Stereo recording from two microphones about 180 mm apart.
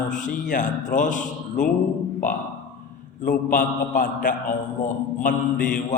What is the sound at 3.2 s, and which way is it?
A man's voice, 45° left (ahead or behind).